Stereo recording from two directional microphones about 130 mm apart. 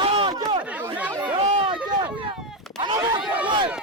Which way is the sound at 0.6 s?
10° right (ahead or behind).